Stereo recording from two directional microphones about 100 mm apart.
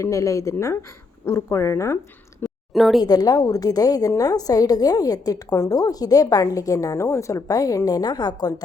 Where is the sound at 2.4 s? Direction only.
20° left (ahead or behind).